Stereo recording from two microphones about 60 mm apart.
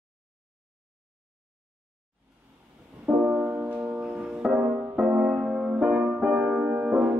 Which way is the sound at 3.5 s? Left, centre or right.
Right.